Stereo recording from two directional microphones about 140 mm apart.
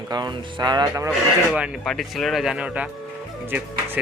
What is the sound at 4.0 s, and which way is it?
Speech, 10° right (ahead or behind).